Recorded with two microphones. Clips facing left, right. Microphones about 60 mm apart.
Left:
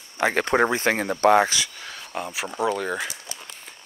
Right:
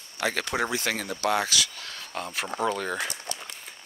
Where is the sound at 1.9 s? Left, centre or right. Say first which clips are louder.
Left 3 dB; centre.